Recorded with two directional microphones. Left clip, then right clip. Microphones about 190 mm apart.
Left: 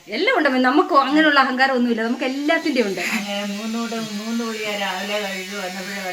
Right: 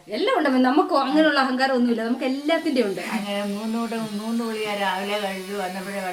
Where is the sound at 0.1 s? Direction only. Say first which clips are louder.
Left 3 dB; 20° left (ahead or behind).